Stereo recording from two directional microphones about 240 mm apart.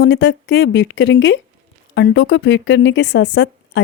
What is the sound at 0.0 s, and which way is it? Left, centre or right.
Speech, left.